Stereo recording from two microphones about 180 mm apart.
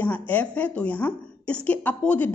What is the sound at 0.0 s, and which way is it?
A woman's voice, 10° left (ahead or behind).